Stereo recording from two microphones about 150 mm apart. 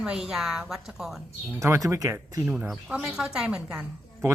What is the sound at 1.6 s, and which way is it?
Speech, 20° right (ahead or behind).